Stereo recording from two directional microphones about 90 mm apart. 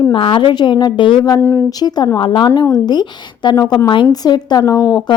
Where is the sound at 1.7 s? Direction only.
50° left (ahead or behind).